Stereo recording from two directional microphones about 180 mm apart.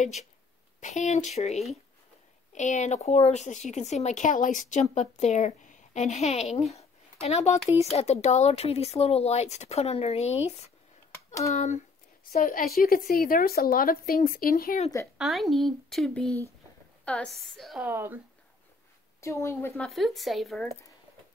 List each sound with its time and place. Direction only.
0.0 s speech: 40° left (ahead or behind)
11.1 s a sound: 15° left (ahead or behind)
11.5 s speech: 40° left (ahead or behind)
12.3 s speech: 50° left (ahead or behind)
15.1 s speech: centre (ahead or behind)
19.2 s speech: 15° left (ahead or behind)
19.9 s speech: centre (ahead or behind)